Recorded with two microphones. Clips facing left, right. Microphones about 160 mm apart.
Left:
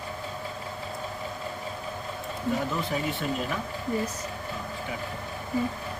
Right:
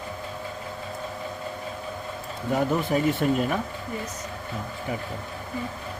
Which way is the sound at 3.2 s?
50° right (ahead or behind).